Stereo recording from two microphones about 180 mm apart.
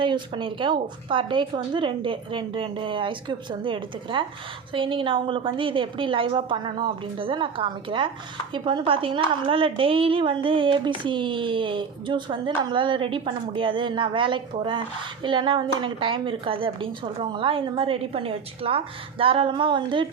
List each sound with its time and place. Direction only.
0.0 s a woman's voice: 30° right (ahead or behind)